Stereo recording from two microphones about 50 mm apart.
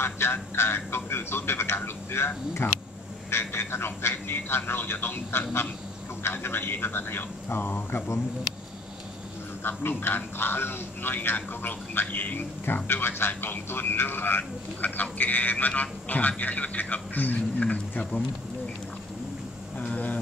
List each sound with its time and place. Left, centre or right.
0.0 s speech: left
9.6 s speech: left
12.6 s a man's voice: left